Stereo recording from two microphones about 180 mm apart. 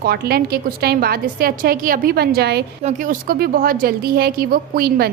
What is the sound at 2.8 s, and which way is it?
A woman's voice, 45° right (ahead or behind).